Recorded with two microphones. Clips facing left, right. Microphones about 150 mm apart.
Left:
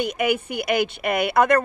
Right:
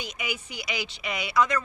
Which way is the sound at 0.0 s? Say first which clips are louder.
Left 13 dB; 55° left (ahead or behind).